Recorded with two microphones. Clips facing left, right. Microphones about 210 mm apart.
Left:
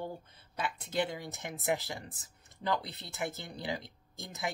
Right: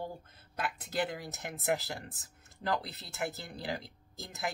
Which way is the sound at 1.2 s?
5° right (ahead or behind).